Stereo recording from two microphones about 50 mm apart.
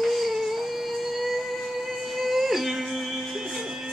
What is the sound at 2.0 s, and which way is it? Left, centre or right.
Music, centre.